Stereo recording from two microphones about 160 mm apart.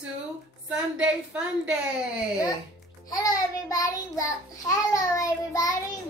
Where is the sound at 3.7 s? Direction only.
20° left (ahead or behind).